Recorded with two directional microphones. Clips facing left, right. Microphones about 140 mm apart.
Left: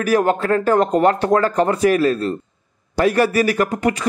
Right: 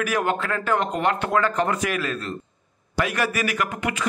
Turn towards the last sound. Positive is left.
turn(degrees=40)  # may be behind; listen again after turning